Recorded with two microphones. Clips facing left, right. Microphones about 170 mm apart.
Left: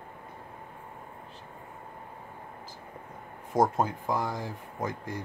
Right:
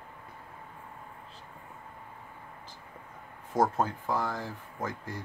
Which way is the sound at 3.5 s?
15° left (ahead or behind).